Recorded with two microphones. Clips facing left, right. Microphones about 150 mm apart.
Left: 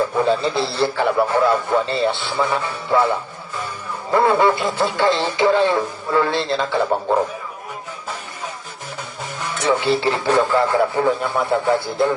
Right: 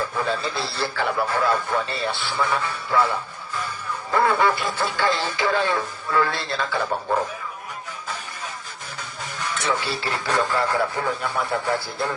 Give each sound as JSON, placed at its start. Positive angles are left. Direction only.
{"t": 0.0, "sound": "a man's voice", "side_deg": 25}
{"t": 9.6, "sound": "a man's voice", "side_deg": 25}